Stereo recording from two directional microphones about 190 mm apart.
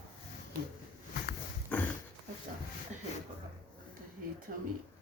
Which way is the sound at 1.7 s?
5° left (ahead or behind).